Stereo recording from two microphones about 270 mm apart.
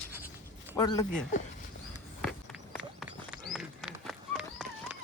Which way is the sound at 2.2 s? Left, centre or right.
Centre.